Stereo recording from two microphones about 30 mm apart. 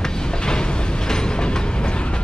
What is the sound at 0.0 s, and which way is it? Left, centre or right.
Train, left.